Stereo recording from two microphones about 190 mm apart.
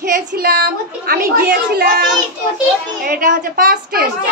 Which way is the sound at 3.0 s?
45° right (ahead or behind).